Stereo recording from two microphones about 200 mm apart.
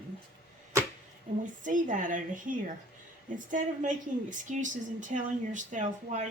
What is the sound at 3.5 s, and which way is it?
A woman's voice, 40° right (ahead or behind).